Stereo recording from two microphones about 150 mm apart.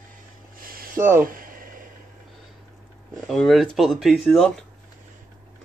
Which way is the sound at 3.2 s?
Centre (ahead or behind).